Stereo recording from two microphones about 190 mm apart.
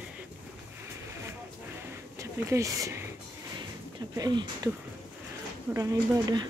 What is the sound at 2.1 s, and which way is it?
Speech, 15° right (ahead or behind).